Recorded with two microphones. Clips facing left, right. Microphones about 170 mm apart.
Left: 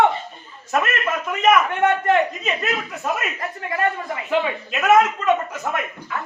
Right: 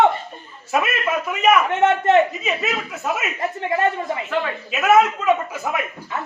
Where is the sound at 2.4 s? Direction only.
5° right (ahead or behind).